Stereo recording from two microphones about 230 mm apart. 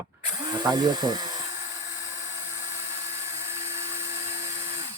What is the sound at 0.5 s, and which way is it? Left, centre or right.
Speech, centre.